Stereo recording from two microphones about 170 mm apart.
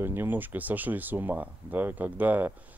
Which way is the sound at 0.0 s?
15° right (ahead or behind).